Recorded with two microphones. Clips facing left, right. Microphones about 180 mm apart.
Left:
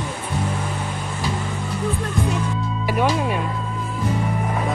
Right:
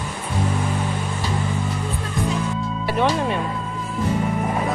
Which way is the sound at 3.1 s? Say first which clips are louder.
Even; 5° left (ahead or behind).